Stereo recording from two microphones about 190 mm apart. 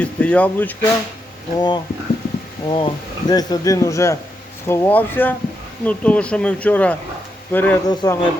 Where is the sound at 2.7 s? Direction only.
25° left (ahead or behind).